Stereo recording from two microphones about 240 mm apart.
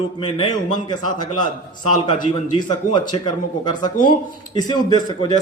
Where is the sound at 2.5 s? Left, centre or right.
Centre.